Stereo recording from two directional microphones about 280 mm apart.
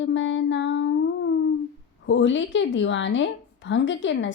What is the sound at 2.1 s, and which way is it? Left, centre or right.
A woman's voice, left.